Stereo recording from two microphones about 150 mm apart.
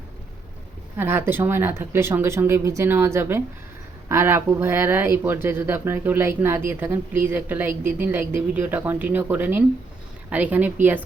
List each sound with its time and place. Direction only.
0.9 s a woman's voice: 15° right (ahead or behind)